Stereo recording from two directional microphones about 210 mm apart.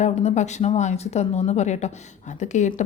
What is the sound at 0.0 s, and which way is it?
A woman's voice, 30° left (ahead or behind).